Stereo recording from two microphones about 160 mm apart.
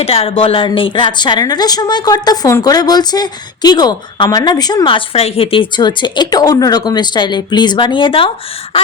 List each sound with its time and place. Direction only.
0.0 s speech: 35° left (ahead or behind)